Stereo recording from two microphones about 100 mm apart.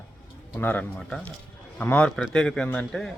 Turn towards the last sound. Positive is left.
turn(degrees=10)  # may be behind; listen again after turning